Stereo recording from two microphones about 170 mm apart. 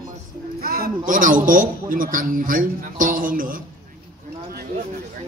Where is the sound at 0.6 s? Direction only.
60° right (ahead or behind).